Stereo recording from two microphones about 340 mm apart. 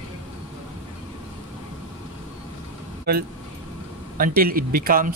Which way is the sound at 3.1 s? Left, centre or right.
Right.